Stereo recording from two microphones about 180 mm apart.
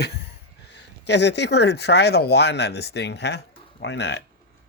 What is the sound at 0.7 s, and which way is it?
Speech, 75° left (ahead or behind).